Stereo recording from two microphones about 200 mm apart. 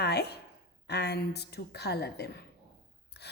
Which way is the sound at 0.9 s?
55° left (ahead or behind).